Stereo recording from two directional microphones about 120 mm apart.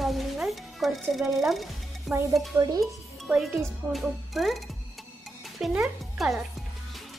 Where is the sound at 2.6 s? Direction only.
35° right (ahead or behind).